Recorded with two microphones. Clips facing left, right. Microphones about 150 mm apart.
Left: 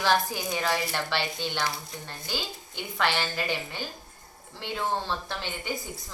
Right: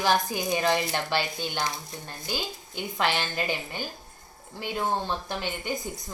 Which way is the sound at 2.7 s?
50° right (ahead or behind).